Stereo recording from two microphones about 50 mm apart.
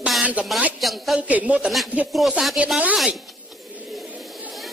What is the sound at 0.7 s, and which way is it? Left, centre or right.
Speech, centre.